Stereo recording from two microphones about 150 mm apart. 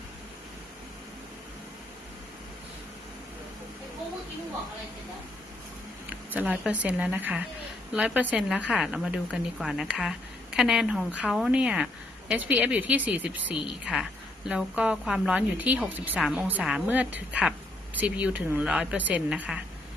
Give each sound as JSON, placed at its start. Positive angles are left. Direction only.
{"t": 6.1, "sound": "a woman's voice", "side_deg": -10}